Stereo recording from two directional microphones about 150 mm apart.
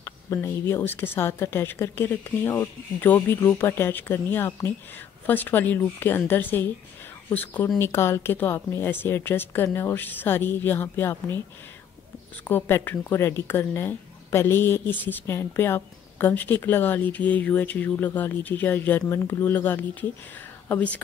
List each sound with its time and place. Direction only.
0.0 s speech: 15° left (ahead or behind)
12.4 s speech: 15° left (ahead or behind)